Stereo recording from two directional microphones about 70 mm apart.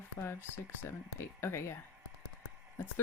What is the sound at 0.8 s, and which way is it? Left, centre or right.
Speech, left.